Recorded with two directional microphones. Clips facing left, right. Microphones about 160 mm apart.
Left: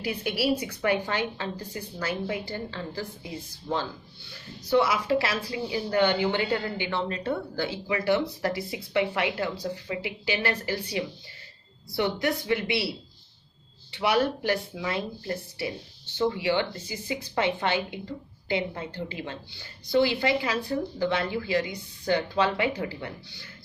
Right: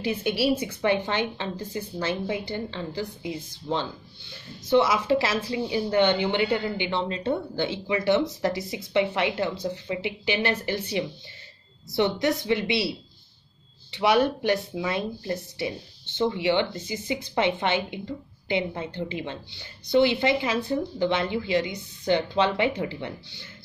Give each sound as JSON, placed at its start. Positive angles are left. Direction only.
{"t": 0.0, "sound": "speech", "side_deg": -25}
{"t": 13.9, "sound": "speech", "side_deg": -20}